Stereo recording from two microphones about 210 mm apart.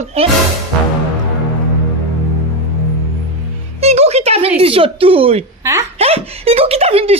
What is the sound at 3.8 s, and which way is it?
Music, 30° right (ahead or behind).